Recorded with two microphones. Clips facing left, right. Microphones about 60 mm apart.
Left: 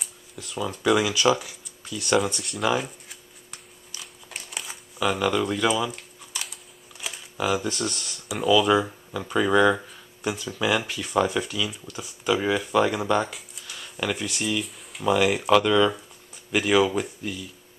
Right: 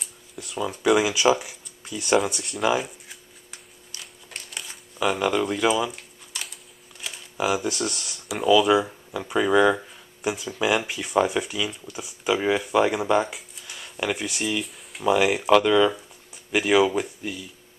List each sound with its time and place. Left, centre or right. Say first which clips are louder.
0.4 s speech: right 1 dB; centre
2.1 s speech: right 1 dB; centre
3.9 s a sound: left 1 dB; centre
5.0 s speech: right 1 dB; centre
6.3 s a sound: left 1 dB; centre
7.3 s speech: right 1 dB; centre